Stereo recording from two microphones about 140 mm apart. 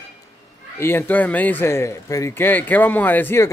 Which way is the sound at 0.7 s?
15° left (ahead or behind).